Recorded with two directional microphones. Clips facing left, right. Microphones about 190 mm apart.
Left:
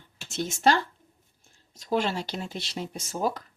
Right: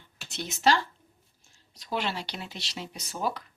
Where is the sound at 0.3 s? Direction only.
45° left (ahead or behind).